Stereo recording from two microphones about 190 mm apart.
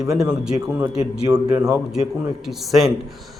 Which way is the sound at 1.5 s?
15° right (ahead or behind).